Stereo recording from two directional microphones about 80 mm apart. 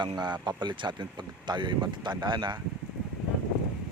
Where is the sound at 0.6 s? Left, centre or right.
Right.